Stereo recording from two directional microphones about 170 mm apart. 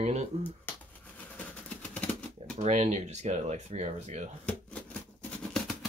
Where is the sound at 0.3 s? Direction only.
35° right (ahead or behind).